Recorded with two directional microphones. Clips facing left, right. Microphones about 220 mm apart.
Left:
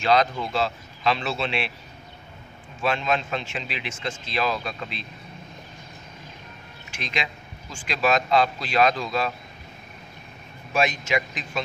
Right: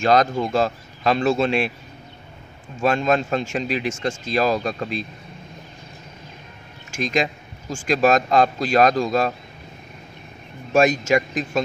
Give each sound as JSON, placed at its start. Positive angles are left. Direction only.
{"t": 0.0, "sound": "speech", "side_deg": -45}
{"t": 2.8, "sound": "speech", "side_deg": -45}
{"t": 6.9, "sound": "speech", "side_deg": -45}
{"t": 10.7, "sound": "speech", "side_deg": -45}